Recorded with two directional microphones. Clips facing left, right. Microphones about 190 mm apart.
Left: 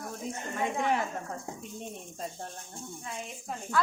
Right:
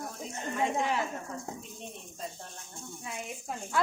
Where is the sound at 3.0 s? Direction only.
10° right (ahead or behind).